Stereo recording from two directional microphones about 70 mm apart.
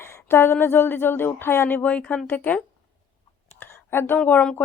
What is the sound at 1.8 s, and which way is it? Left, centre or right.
Speech, centre.